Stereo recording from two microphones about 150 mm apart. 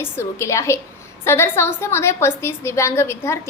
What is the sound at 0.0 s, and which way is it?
A woman's voice, 20° left (ahead or behind).